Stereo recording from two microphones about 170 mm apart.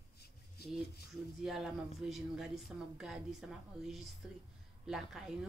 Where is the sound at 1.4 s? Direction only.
Centre (ahead or behind).